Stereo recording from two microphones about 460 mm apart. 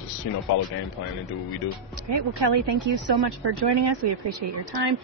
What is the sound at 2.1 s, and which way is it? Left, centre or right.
Speech, right.